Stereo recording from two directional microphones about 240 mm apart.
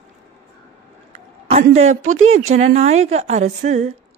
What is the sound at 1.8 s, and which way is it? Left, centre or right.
Speech, right.